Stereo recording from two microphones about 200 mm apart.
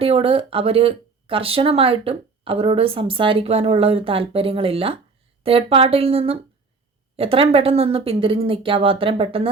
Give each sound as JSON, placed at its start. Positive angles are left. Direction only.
{"t": 0.0, "sound": "speech", "side_deg": -30}